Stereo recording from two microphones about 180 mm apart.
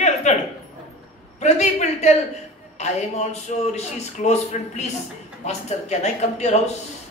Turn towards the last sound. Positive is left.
turn(degrees=40)  # may be behind; listen again after turning